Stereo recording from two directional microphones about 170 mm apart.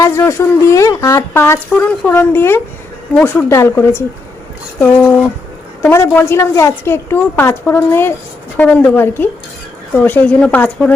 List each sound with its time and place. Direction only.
0.0 s a woman's voice: 15° left (ahead or behind)